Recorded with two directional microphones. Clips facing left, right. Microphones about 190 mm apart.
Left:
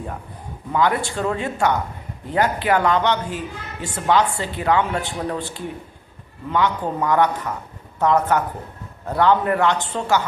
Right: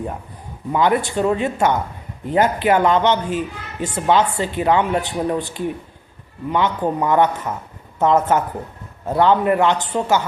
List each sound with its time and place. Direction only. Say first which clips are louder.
0.7 s a woman's voice: right 3 dB; 20° right (ahead or behind)